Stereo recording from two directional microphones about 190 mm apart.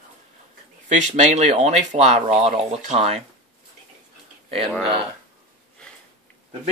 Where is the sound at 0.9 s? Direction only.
40° right (ahead or behind).